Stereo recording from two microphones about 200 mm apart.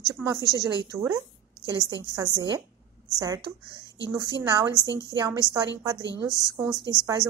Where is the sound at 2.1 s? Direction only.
20° right (ahead or behind).